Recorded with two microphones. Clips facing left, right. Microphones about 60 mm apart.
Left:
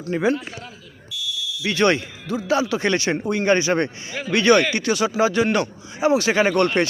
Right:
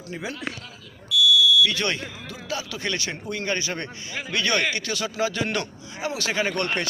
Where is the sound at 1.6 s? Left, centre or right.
Left.